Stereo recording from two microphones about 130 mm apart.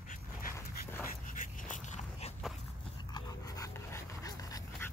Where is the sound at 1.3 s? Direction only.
90° left; by 2.3 s 65° left (ahead or behind).